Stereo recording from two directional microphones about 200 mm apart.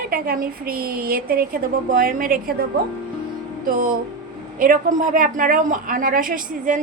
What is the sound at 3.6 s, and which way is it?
A woman's voice, 45° right (ahead or behind).